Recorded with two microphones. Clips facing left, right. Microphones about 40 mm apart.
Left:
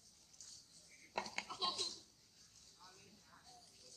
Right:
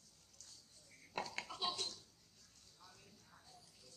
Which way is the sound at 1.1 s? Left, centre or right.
Centre.